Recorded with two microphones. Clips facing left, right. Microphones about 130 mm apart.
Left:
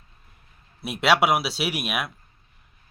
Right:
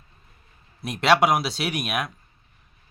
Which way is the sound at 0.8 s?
5° left (ahead or behind).